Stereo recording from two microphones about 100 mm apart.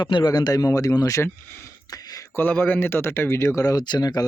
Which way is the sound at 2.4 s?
20° left (ahead or behind).